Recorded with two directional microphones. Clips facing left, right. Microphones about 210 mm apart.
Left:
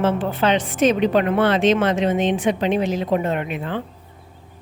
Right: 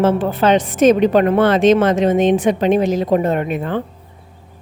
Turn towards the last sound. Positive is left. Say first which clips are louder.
# right 5 dB
turn(degrees=-45)  # may be behind; listen again after turning